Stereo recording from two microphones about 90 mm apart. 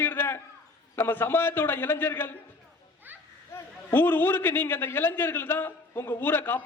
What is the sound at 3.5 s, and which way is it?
A man's voice, 20° left (ahead or behind).